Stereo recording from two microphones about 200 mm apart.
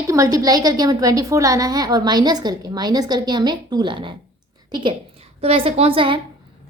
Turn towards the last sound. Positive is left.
turn(degrees=-25)  # may be behind; listen again after turning